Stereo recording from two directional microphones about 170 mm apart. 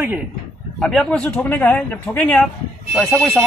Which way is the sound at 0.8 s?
5° left (ahead or behind).